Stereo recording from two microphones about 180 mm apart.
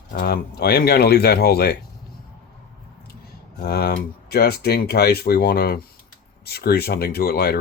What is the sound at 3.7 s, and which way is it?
Speech, 60° left (ahead or behind).